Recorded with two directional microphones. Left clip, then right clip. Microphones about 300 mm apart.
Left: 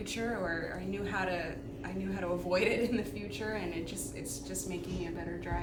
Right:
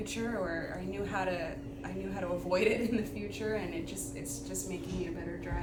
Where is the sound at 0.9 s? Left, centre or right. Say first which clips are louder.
Even; centre.